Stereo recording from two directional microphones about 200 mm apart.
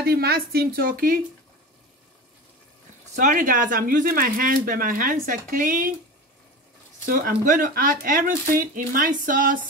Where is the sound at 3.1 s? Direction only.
40° right (ahead or behind).